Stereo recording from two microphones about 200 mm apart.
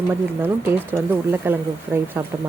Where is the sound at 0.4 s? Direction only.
10° right (ahead or behind).